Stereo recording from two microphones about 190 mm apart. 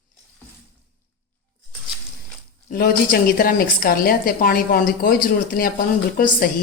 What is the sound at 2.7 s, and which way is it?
A woman's voice, 50° left (ahead or behind).